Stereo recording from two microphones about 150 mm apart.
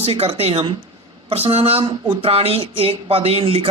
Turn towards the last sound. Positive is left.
turn(degrees=-40)  # may be behind; listen again after turning